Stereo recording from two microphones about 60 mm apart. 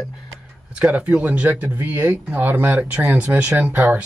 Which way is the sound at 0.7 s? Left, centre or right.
Right.